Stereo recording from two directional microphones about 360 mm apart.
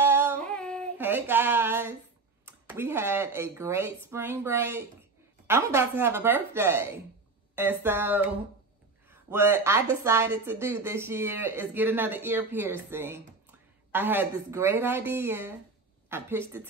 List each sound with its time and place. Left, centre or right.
0.0 s female singing: centre
2.4 s a woman's voice: centre
9.3 s a woman's voice: centre